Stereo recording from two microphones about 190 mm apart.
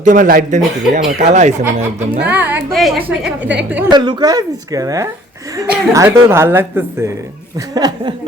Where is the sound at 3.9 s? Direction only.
20° right (ahead or behind).